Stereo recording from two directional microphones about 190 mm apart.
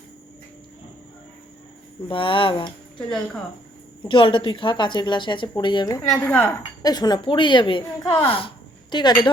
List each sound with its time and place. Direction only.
2.0 s a woman's voice: 25° left (ahead or behind)
4.1 s a woman's voice: 25° left (ahead or behind)
6.1 s speech: 5° left (ahead or behind)
6.8 s a woman's voice: 20° left (ahead or behind)